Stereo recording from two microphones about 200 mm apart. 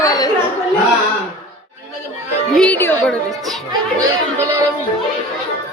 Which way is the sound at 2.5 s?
5° left (ahead or behind).